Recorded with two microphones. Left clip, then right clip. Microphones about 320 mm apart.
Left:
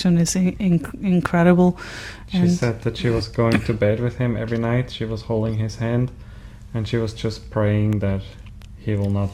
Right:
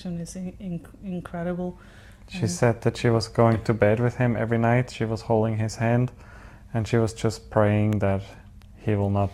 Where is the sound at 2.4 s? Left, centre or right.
Centre.